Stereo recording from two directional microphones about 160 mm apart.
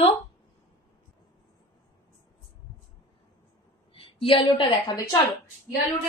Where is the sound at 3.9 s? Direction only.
35° left (ahead or behind).